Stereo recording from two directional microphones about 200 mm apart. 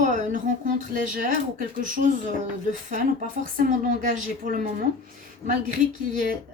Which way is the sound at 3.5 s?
45° right (ahead or behind).